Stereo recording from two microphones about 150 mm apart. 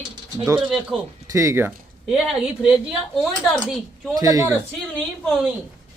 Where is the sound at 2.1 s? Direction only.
5° right (ahead or behind).